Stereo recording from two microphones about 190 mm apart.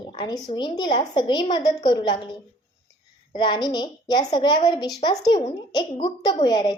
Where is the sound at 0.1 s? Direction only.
25° left (ahead or behind).